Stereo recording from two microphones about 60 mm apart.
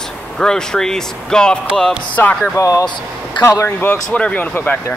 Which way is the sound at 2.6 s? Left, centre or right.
Left.